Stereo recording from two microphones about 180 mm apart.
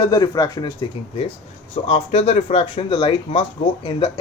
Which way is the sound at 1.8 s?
35° left (ahead or behind).